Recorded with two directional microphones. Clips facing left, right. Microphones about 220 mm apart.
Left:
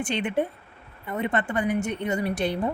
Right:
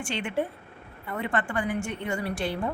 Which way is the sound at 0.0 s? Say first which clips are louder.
Left 4 dB; 20° left (ahead or behind).